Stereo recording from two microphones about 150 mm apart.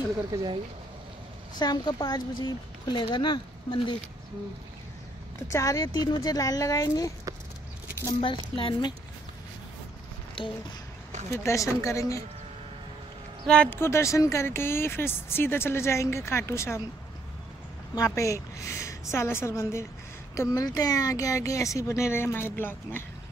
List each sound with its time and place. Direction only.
0.3 s speech: 20° right (ahead or behind)
1.6 s speech: 25° left (ahead or behind)
5.5 s speech: 20° left (ahead or behind)
8.2 s speech: 35° left (ahead or behind)
10.4 s speech: 35° left (ahead or behind)
11.3 s speech: 20° left (ahead or behind)
13.5 s speech: 10° left (ahead or behind)
17.9 s speech: 20° left (ahead or behind)